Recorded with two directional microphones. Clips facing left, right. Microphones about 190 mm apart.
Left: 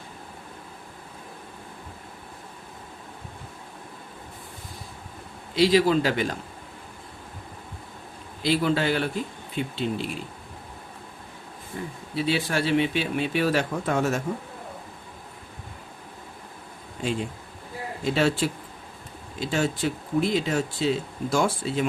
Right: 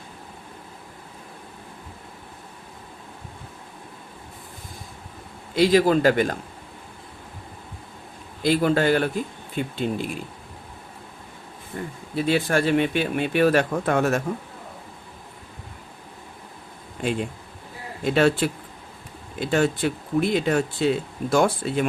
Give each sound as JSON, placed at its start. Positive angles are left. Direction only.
{"t": 5.5, "sound": "speech", "side_deg": -50}
{"t": 8.4, "sound": "speech", "side_deg": -50}
{"t": 11.7, "sound": "speech", "side_deg": -50}
{"t": 17.0, "sound": "speech", "side_deg": -60}